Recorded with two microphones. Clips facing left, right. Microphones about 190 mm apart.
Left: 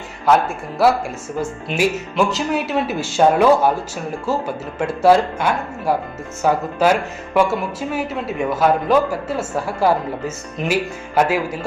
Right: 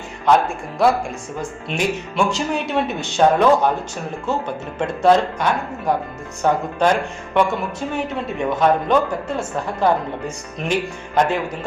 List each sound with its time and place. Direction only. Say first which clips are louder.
0.3 s a man's voice: even; 5° left (ahead or behind)